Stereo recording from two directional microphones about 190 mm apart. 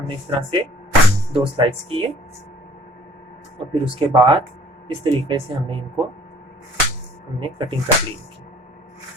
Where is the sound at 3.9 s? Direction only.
30° right (ahead or behind).